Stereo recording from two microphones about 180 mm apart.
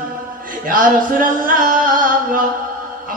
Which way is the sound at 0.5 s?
50° right (ahead or behind).